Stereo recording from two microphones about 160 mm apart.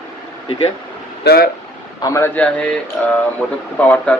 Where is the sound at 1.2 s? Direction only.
90° left.